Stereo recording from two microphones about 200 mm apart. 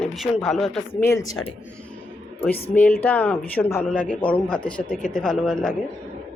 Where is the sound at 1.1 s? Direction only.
15° left (ahead or behind).